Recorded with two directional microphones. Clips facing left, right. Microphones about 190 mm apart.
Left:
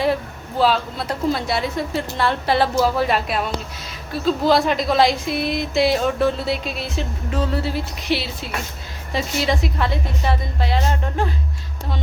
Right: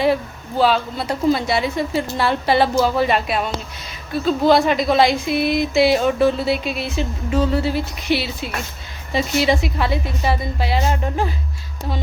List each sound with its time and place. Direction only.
0.6 s speech: centre (ahead or behind)